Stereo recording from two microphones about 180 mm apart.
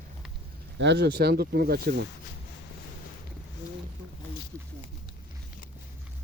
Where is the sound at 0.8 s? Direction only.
75° right (ahead or behind); by 2.0 s 55° right (ahead or behind).